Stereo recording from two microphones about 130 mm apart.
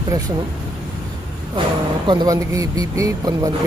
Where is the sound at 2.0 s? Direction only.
35° right (ahead or behind).